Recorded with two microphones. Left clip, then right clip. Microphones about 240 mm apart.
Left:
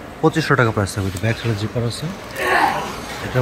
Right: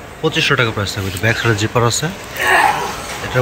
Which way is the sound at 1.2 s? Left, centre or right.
Centre.